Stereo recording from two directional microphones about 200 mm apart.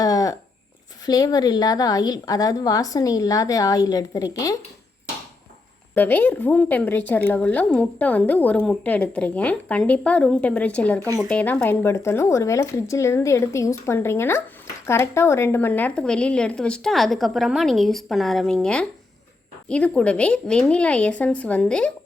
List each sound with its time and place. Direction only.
0.0 s a sound: 15° left (ahead or behind)
1.0 s a woman's voice: 20° left (ahead or behind)
5.9 s a woman's voice: 10° left (ahead or behind)